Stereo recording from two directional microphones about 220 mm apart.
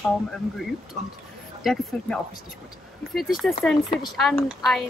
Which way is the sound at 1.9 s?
Centre (ahead or behind).